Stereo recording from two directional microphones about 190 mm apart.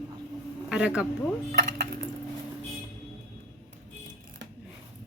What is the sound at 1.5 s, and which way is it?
Dishes, 50° right (ahead or behind).